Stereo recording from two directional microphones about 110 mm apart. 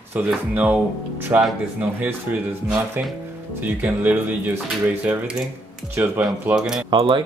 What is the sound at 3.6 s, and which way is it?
Speech, 15° right (ahead or behind).